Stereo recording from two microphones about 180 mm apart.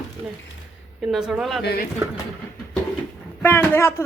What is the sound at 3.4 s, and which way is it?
Speech, 10° left (ahead or behind).